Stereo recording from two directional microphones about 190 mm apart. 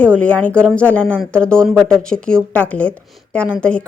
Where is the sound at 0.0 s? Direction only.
5° left (ahead or behind).